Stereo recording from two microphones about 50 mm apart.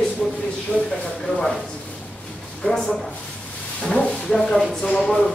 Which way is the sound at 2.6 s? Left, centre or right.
Left.